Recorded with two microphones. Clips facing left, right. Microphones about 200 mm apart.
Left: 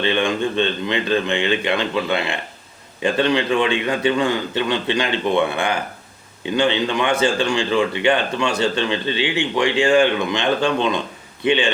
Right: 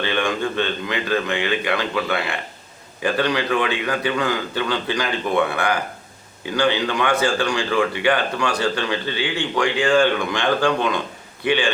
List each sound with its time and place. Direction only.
0.0 s speech: 20° left (ahead or behind)